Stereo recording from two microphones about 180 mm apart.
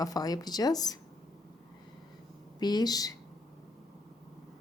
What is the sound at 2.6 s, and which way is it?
Speech, 20° left (ahead or behind).